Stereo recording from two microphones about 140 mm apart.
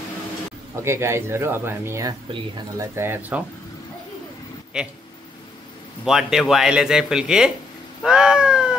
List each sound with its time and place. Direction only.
0.8 s speech: 20° right (ahead or behind)
4.7 s speech: 5° right (ahead or behind)
6.0 s speech: 5° right (ahead or behind)